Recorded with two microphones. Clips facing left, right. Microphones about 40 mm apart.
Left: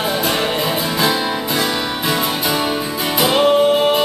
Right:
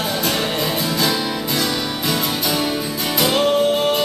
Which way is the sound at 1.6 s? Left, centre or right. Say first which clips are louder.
Left 2 dB; centre.